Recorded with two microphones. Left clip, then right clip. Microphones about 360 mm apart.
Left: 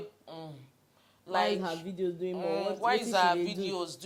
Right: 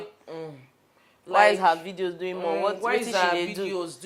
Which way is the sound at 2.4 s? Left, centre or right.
Left.